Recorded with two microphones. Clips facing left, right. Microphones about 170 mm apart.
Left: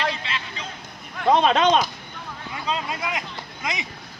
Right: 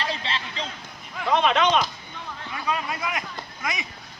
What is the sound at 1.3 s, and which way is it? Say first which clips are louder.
Speech: left 3 dB; 35° left (ahead or behind).